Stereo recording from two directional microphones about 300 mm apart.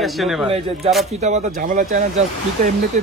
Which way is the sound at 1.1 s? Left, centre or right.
Right.